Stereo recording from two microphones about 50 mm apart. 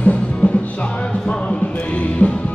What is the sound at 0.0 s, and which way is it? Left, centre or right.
Music, left.